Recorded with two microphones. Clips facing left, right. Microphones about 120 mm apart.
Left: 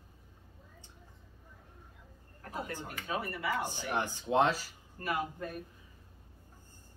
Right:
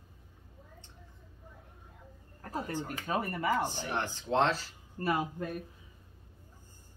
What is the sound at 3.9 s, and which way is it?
Speech, 10° left (ahead or behind).